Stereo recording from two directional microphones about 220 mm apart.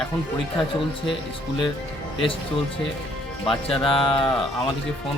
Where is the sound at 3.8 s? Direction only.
25° left (ahead or behind).